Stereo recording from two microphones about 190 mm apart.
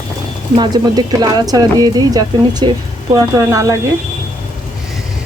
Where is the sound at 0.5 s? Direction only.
20° right (ahead or behind).